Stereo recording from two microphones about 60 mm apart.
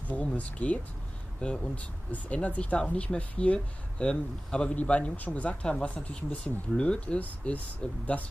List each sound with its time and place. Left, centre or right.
0.1 s speech: left